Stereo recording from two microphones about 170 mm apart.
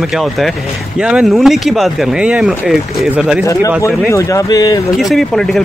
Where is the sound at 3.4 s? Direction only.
20° left (ahead or behind).